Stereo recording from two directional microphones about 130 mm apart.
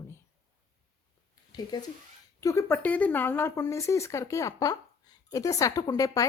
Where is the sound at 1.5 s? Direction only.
30° left (ahead or behind).